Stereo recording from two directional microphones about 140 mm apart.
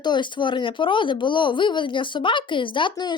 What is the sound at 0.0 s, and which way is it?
Speech, 35° left (ahead or behind).